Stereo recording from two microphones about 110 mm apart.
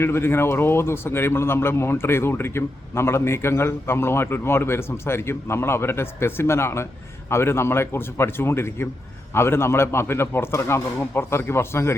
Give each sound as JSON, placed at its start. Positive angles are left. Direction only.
{"t": 0.0, "sound": "a man's voice", "side_deg": 20}